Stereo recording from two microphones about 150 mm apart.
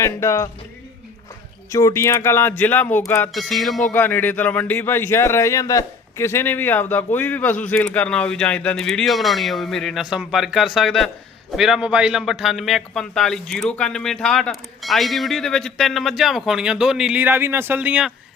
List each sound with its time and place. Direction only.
0.0 s speech: 20° left (ahead or behind)
1.7 s a man's voice: 20° left (ahead or behind)
3.3 s a man's voice: centre (ahead or behind)
3.9 s a man's voice: 10° left (ahead or behind); by 18.1 s 10° right (ahead or behind)